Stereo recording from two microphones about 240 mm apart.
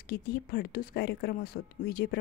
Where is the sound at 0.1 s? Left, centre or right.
Left.